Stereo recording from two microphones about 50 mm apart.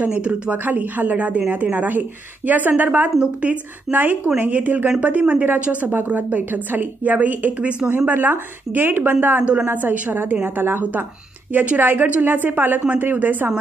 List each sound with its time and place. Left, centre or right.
0.0 s a woman's voice: right
9.4 s a woman's voice: right
9.7 s a woman's voice: right